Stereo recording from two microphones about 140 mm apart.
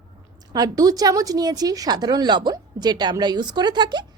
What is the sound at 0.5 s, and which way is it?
A woman's voice, 25° right (ahead or behind).